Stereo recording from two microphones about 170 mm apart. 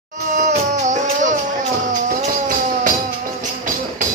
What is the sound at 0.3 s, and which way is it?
Music, 45° right (ahead or behind).